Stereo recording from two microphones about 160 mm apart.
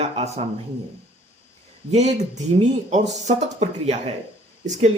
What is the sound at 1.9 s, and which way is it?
Speech, 45° right (ahead or behind).